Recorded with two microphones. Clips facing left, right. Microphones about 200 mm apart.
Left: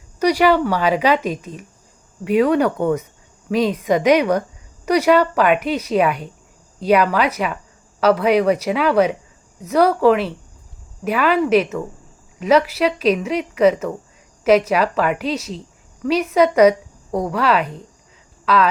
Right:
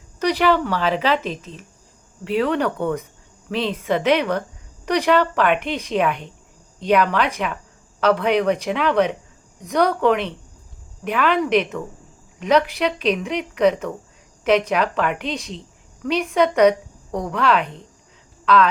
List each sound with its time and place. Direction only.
0.2 s a woman's voice: 10° left (ahead or behind)